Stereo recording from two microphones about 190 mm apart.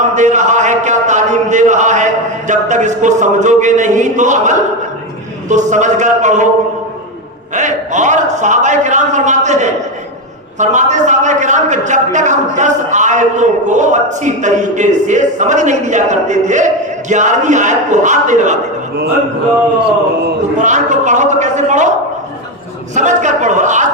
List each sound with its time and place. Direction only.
0.0 s a sound: 40° right (ahead or behind)
5.5 s a man's voice: 40° right (ahead or behind)
7.5 s a man's voice: 40° right (ahead or behind)
20.6 s a man's voice: 40° right (ahead or behind)
23.0 s a man's voice: 40° right (ahead or behind)